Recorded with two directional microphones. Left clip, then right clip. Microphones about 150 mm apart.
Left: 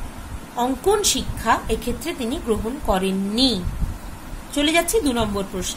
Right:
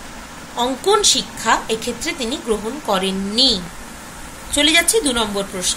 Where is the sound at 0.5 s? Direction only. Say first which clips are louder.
Right 3 dB; 50° left (ahead or behind).